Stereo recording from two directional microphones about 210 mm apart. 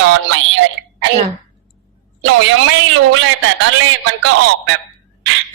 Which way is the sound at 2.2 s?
65° right (ahead or behind).